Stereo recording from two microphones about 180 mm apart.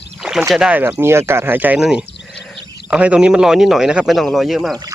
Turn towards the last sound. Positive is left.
turn(degrees=0)  # may be behind; listen again after turning